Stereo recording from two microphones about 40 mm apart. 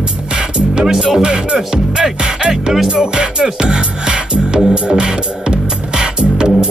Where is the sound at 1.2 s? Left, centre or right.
Right.